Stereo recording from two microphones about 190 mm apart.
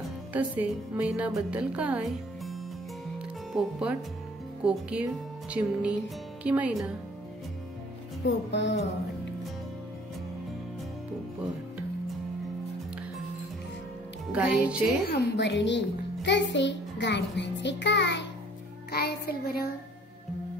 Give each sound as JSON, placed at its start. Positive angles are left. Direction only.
{"t": 0.3, "sound": "speech", "side_deg": -10}
{"t": 3.2, "sound": "music", "side_deg": -5}
{"t": 4.6, "sound": "speech", "side_deg": -5}
{"t": 8.3, "sound": "music", "side_deg": 65}
{"t": 14.3, "sound": "speech", "side_deg": -5}
{"t": 15.0, "sound": "a child's voice", "side_deg": 60}
{"t": 16.5, "sound": "music", "side_deg": 65}
{"t": 18.9, "sound": "a child's voice", "side_deg": 55}